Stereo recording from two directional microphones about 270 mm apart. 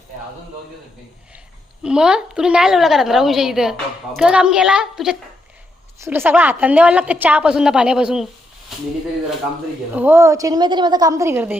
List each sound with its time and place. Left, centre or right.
1.8 s a woman's voice: centre
9.9 s a woman's voice: centre